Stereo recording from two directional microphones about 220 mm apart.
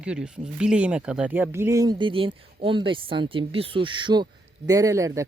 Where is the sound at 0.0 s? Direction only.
5° right (ahead or behind).